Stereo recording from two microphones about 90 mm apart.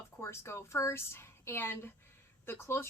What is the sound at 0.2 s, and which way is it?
A woman's voice, 30° left (ahead or behind).